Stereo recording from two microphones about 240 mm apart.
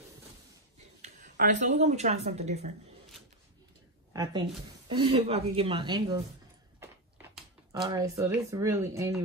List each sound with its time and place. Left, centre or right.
1.0 s speech: right
4.1 s speech: centre
6.8 s a sound: centre